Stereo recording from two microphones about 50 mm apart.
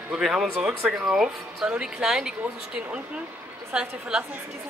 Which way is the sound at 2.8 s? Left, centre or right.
Right.